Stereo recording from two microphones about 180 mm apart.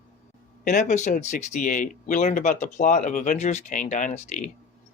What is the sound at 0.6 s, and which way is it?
Speech, 45° left (ahead or behind).